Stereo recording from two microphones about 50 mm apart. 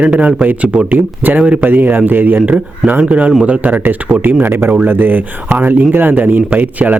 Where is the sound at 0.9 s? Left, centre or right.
Right.